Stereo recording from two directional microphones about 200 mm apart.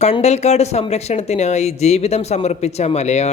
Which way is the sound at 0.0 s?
35° left (ahead or behind).